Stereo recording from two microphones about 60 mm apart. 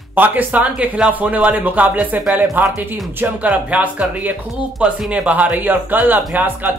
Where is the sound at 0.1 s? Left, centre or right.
Right.